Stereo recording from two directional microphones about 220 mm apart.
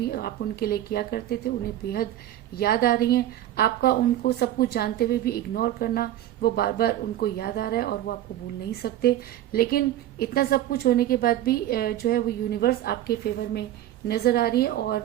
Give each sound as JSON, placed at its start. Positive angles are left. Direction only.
{"t": 0.0, "sound": "a woman's voice", "side_deg": 45}